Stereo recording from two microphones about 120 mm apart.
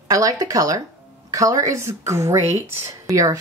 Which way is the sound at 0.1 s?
30° right (ahead or behind).